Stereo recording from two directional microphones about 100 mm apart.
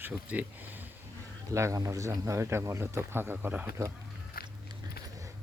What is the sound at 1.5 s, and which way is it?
Speech, 30° right (ahead or behind).